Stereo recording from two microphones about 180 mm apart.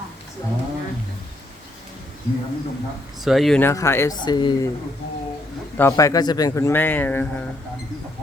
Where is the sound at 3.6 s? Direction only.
15° left (ahead or behind).